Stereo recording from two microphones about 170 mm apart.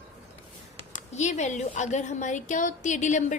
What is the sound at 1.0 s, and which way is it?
A woman's voice, 45° left (ahead or behind).